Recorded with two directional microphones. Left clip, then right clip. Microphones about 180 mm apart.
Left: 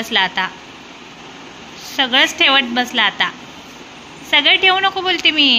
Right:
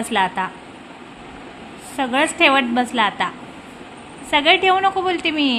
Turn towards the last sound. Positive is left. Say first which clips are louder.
# left 7 dB
turn(degrees=-10)  # may be behind; listen again after turning